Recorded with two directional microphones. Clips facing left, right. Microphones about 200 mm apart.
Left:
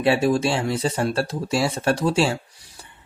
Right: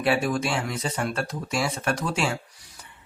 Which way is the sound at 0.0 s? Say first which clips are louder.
Left 5 dB; 25° left (ahead or behind).